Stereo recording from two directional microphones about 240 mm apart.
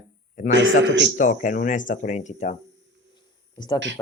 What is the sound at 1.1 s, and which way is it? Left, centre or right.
Speech, left.